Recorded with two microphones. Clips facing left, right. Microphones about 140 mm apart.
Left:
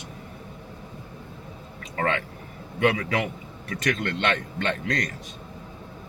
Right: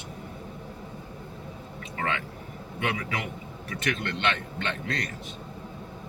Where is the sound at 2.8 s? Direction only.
40° left (ahead or behind).